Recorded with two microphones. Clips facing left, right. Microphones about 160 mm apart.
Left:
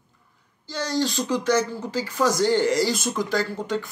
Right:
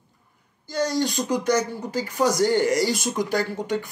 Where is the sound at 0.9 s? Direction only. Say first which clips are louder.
Left 4 dB; 15° right (ahead or behind).